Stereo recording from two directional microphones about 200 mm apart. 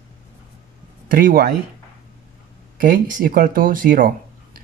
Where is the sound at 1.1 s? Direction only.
45° right (ahead or behind).